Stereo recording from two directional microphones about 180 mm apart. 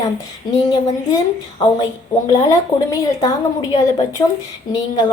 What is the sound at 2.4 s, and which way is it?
A woman's voice, 20° left (ahead or behind).